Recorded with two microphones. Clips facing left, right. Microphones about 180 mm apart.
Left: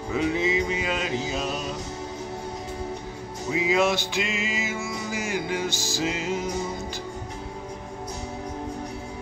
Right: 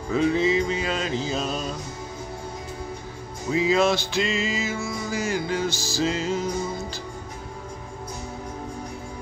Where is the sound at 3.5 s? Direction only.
15° left (ahead or behind).